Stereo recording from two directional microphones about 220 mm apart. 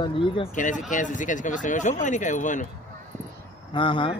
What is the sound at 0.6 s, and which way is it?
Speech, 35° left (ahead or behind).